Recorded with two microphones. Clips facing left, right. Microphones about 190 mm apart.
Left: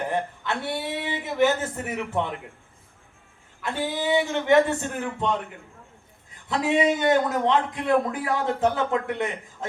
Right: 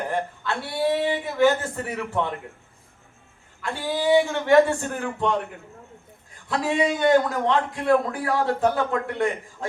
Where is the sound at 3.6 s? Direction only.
20° left (ahead or behind).